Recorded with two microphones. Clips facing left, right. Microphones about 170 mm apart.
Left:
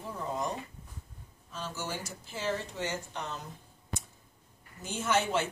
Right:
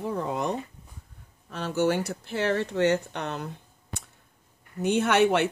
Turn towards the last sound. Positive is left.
turn(degrees=-65)  # may be behind; listen again after turning